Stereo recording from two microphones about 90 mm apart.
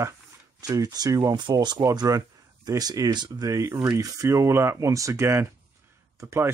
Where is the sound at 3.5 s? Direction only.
35° right (ahead or behind).